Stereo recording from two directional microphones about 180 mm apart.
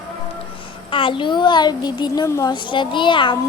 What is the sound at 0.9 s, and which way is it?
A woman's voice, 30° left (ahead or behind).